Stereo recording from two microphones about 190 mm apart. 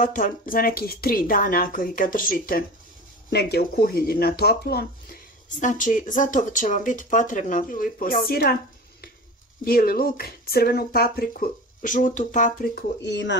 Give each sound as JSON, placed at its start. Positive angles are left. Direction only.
{"t": 0.0, "sound": "speech", "side_deg": 45}
{"t": 9.7, "sound": "speech", "side_deg": 50}
{"t": 13.0, "sound": "speech", "side_deg": 65}